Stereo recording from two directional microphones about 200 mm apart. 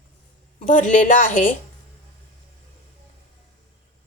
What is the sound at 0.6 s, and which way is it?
Speech, 40° left (ahead or behind).